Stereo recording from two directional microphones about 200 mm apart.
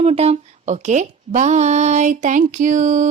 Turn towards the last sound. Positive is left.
turn(degrees=-40)  # may be behind; listen again after turning